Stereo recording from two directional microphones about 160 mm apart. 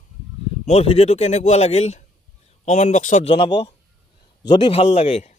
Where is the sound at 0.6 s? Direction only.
40° left (ahead or behind).